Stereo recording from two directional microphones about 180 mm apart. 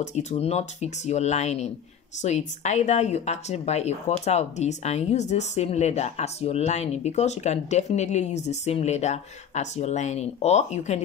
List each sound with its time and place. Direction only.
0.0 s speech: 40° left (ahead or behind)